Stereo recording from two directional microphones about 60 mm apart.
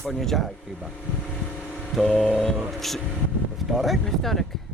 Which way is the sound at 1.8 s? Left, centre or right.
Centre.